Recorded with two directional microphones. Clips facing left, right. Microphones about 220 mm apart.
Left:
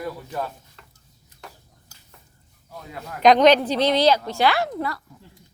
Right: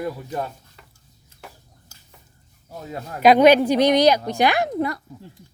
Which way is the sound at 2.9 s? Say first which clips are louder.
Right 4 dB; 40° right (ahead or behind).